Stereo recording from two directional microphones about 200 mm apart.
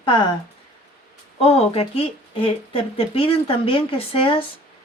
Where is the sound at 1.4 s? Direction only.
30° left (ahead or behind).